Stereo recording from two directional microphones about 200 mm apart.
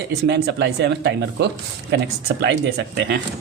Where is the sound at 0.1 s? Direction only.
55° right (ahead or behind).